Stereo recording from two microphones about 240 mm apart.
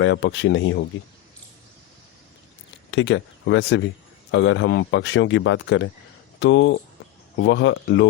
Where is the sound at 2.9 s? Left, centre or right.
Left.